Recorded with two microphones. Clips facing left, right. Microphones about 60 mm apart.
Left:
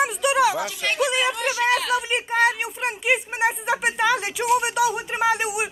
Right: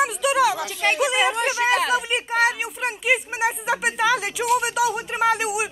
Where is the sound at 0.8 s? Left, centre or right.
Right.